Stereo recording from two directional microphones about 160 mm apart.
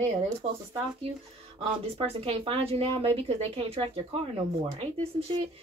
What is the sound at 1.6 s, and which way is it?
A woman's voice, 35° right (ahead or behind).